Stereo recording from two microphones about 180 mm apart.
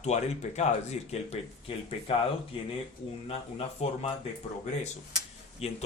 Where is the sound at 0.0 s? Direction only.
40° left (ahead or behind).